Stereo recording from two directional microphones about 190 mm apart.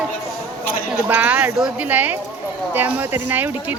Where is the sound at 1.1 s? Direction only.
10° right (ahead or behind).